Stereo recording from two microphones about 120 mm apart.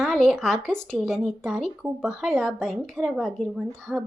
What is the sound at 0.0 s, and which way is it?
Speech, centre (ahead or behind).